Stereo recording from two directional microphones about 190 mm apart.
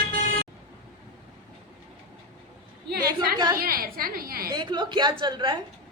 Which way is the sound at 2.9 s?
55° right (ahead or behind).